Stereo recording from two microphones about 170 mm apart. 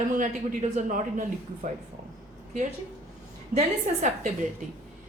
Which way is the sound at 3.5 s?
45° right (ahead or behind).